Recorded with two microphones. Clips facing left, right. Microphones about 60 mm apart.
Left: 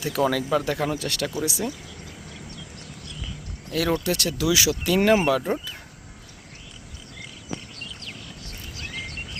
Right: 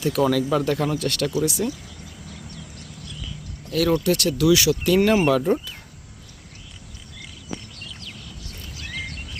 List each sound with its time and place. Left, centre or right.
0.0 s speech: centre
3.7 s speech: centre